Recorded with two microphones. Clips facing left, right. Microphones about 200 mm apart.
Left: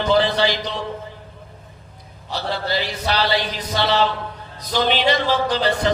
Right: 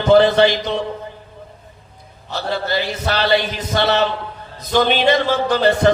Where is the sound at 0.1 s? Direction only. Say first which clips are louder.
Right 8 dB; 50° right (ahead or behind).